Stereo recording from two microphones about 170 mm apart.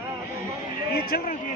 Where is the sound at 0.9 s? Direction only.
60° left (ahead or behind).